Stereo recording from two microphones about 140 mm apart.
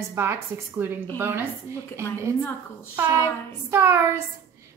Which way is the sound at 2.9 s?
15° right (ahead or behind).